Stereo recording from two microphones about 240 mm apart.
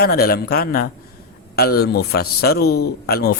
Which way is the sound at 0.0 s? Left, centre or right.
Left.